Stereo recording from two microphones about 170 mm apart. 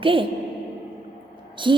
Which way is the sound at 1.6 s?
30° right (ahead or behind).